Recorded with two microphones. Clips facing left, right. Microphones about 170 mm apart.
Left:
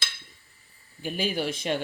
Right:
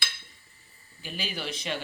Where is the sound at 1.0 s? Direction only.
50° left (ahead or behind).